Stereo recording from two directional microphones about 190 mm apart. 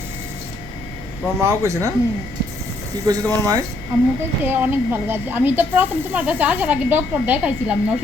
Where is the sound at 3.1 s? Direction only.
20° right (ahead or behind).